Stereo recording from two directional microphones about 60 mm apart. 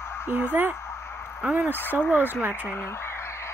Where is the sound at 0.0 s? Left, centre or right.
Left.